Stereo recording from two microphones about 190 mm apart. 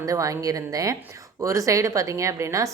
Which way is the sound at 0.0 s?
15° right (ahead or behind).